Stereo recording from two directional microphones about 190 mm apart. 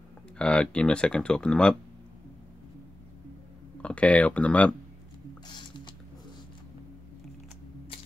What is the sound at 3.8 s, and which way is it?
Speech, 5° left (ahead or behind).